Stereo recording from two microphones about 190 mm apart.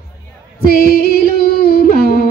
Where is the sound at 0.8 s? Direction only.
55° left (ahead or behind).